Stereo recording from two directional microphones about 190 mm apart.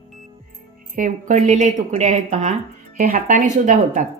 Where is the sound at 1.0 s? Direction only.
40° right (ahead or behind).